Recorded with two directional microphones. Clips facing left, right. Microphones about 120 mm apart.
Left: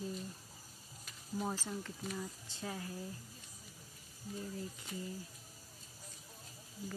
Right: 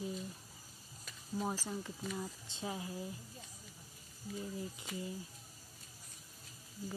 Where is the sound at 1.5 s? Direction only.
10° right (ahead or behind).